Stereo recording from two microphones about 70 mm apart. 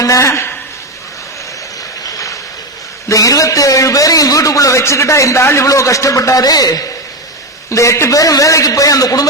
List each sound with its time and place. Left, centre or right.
0.0 s speech: left
2.0 s a sound: left
3.1 s a man's voice: left
7.7 s a man's voice: left
8.1 s a man's voice: left